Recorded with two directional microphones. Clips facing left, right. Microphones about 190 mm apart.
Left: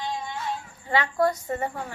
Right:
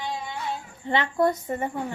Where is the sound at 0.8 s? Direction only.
25° right (ahead or behind).